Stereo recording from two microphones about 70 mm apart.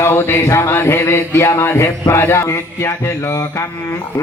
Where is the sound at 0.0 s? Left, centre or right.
Left.